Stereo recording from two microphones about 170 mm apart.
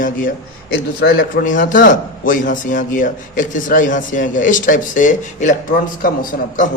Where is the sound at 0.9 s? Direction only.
60° left (ahead or behind).